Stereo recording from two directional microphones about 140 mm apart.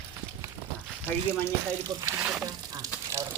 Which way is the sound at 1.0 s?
15° left (ahead or behind).